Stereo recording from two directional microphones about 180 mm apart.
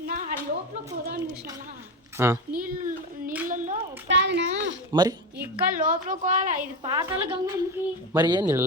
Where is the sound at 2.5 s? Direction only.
55° right (ahead or behind).